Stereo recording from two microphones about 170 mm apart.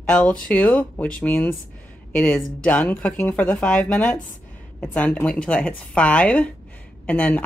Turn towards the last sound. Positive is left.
turn(degrees=10)  # may be behind; listen again after turning